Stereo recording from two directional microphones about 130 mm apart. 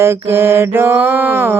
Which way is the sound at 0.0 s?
20° right (ahead or behind).